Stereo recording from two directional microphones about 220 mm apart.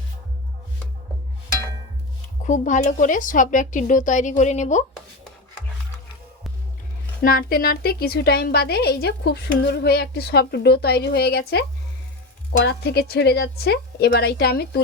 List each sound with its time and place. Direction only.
2.4 s speech: 35° left (ahead or behind)
7.2 s a woman's voice: 40° left (ahead or behind)
12.6 s a woman's voice: 45° left (ahead or behind)